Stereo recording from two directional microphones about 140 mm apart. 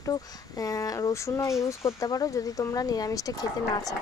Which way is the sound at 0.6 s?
25° left (ahead or behind).